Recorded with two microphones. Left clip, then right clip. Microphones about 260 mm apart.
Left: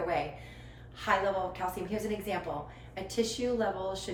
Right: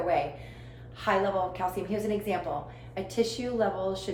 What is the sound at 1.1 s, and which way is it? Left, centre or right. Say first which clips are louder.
Speech: right 2 dB; centre.